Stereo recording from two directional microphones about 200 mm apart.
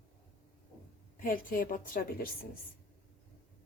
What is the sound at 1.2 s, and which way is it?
A woman's voice, 45° left (ahead or behind).